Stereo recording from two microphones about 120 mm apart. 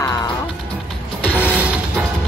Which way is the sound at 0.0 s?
30° left (ahead or behind).